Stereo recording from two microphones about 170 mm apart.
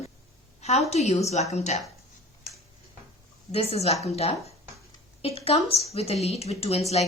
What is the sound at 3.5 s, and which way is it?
Speech, 35° left (ahead or behind).